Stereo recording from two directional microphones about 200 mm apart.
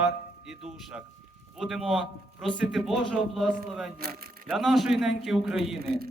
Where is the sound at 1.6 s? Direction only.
Centre (ahead or behind).